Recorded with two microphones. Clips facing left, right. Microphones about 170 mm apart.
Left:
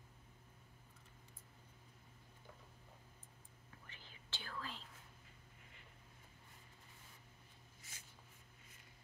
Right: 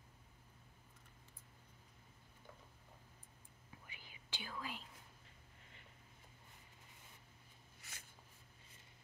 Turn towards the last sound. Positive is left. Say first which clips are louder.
# right 2 dB
turn(degrees=-70)  # may be behind; listen again after turning